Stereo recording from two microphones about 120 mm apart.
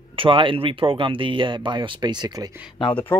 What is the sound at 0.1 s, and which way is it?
Speech, 45° right (ahead or behind).